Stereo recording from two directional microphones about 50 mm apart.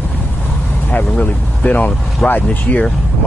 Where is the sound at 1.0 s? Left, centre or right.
Left.